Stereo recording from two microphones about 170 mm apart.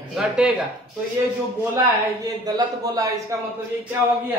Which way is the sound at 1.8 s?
20° right (ahead or behind).